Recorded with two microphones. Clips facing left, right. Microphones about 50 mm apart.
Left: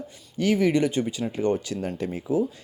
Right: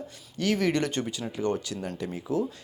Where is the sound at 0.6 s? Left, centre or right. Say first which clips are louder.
Left 4 dB; centre.